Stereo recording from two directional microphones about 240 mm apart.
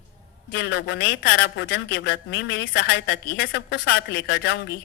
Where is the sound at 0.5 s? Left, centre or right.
Left.